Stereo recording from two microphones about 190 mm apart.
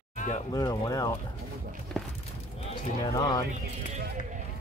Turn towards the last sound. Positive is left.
turn(degrees=20)  # may be behind; listen again after turning